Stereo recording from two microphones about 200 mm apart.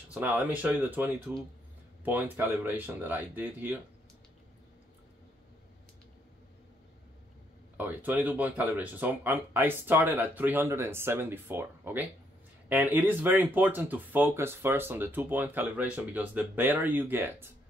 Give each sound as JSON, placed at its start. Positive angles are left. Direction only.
{"t": 0.1, "sound": "speech", "side_deg": -5}
{"t": 7.7, "sound": "speech", "side_deg": -10}